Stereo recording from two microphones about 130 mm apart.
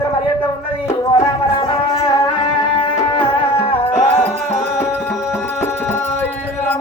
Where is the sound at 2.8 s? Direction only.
40° left (ahead or behind).